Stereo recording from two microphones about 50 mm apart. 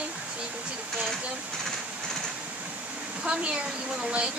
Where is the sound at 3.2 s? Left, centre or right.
Right.